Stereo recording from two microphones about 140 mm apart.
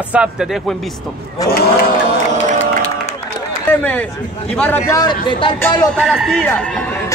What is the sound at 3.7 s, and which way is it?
Speech, 10° left (ahead or behind).